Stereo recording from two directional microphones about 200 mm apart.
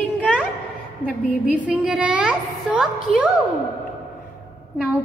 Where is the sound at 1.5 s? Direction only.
5° right (ahead or behind).